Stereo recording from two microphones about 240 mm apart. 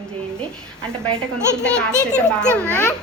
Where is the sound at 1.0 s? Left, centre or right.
Centre.